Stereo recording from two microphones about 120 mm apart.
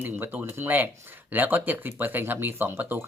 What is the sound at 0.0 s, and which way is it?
Speech, 20° right (ahead or behind).